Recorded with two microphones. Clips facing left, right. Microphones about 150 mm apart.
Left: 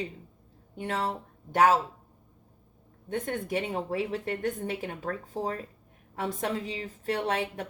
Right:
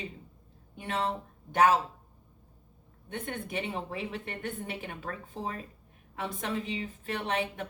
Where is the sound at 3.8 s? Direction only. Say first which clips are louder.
Left 7 dB; 35° left (ahead or behind).